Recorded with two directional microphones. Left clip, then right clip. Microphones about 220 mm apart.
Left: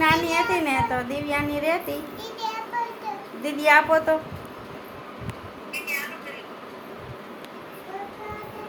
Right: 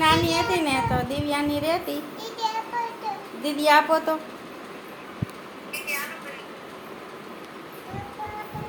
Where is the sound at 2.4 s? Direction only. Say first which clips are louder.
Right 3 dB; 15° right (ahead or behind).